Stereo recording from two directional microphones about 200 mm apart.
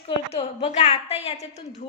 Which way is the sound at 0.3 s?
30° left (ahead or behind).